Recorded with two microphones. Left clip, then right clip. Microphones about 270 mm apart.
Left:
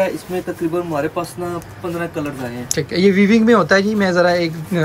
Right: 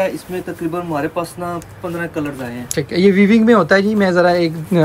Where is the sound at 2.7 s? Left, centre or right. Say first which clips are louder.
Right 1 dB; centre.